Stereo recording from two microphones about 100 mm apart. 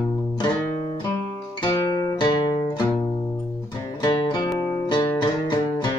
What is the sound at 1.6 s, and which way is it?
Music, 50° left (ahead or behind).